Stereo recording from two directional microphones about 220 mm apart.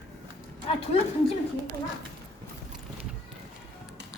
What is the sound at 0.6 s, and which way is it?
Speech, 25° left (ahead or behind).